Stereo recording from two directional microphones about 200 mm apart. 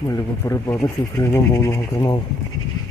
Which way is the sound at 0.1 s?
15° left (ahead or behind).